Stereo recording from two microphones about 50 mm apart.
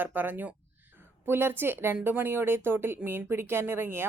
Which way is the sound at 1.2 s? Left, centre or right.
Right.